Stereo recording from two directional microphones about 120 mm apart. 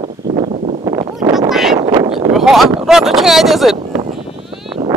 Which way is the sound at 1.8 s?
40° right (ahead or behind).